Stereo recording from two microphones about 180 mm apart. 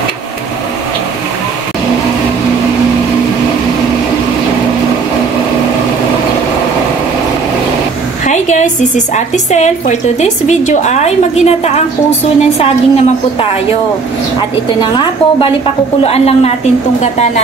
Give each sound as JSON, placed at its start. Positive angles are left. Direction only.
{"t": 8.3, "sound": "a sound", "side_deg": 40}
{"t": 9.1, "sound": "a woman's voice", "side_deg": 40}
{"t": 14.8, "sound": "a woman's voice", "side_deg": 25}